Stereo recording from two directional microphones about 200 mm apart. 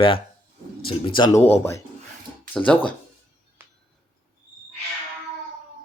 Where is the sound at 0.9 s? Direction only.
25° left (ahead or behind).